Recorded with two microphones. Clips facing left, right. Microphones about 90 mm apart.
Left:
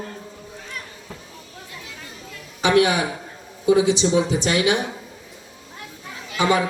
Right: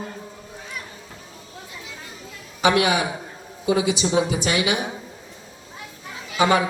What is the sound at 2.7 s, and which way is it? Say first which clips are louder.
Speech: left 4 dB; 5° right (ahead or behind).